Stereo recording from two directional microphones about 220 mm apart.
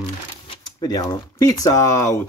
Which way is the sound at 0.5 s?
20° left (ahead or behind).